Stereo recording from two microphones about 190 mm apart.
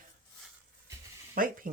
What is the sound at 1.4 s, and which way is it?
Speech, 50° right (ahead or behind).